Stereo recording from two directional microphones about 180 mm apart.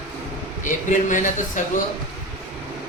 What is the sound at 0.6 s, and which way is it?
Speech, 45° left (ahead or behind).